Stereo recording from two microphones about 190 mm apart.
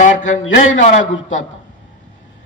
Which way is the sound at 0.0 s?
40° left (ahead or behind).